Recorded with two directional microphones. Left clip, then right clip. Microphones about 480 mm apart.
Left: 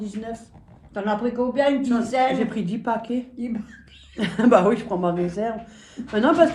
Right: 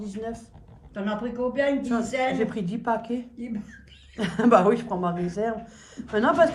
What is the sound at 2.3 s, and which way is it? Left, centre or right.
Speech, centre.